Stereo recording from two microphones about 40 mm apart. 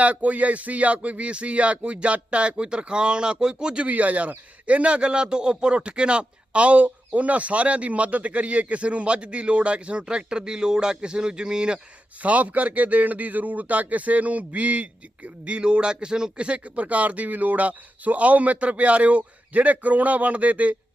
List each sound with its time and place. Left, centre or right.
0.0 s a man's voice: right
3.8 s a man's voice: right
12.2 s a man's voice: right